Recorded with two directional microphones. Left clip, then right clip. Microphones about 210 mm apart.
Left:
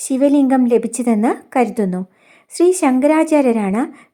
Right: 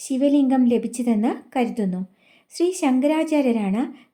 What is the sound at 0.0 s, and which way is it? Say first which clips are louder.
Speech: left 5 dB; 20° left (ahead or behind).